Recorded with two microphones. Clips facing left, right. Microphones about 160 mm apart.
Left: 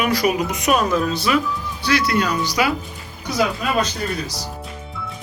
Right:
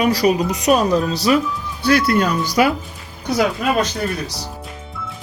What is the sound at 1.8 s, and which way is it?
Speech, 50° right (ahead or behind).